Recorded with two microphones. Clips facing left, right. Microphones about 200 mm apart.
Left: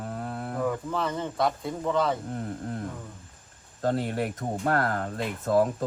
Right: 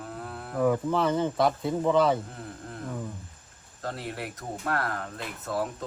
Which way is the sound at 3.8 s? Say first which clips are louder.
Left 8 dB; 45° left (ahead or behind).